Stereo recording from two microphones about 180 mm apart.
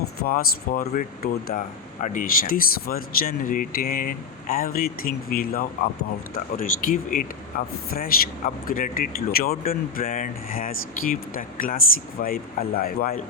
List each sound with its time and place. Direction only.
0.2 s speech: 55° left (ahead or behind)